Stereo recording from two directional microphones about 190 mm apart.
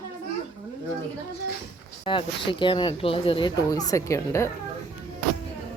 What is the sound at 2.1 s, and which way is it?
A woman's voice, 25° left (ahead or behind).